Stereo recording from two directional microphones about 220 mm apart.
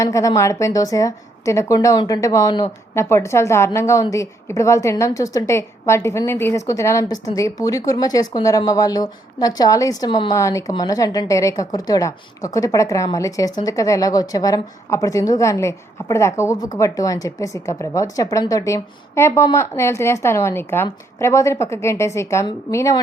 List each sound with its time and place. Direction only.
0.0 s a woman's voice: 15° left (ahead or behind)